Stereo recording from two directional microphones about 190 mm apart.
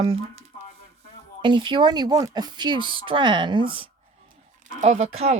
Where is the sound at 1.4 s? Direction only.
25° right (ahead or behind).